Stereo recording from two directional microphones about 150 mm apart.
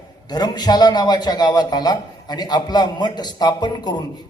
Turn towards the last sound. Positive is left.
turn(degrees=30)  # may be behind; listen again after turning